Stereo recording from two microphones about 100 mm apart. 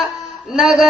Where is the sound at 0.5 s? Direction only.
5° right (ahead or behind).